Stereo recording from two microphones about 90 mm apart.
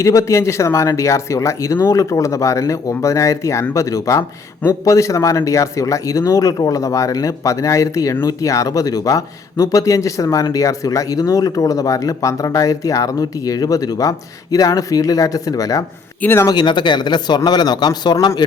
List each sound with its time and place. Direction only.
0.0 s speech: 35° left (ahead or behind)
16.2 s speech: 25° left (ahead or behind)
16.5 s speech: 55° left (ahead or behind)